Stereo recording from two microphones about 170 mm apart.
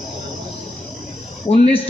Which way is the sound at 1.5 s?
35° left (ahead or behind).